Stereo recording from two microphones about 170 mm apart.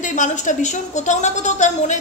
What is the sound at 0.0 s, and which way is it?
A woman's voice, 50° left (ahead or behind).